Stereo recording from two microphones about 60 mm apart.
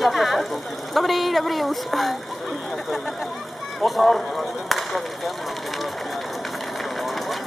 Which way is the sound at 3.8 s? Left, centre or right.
Centre.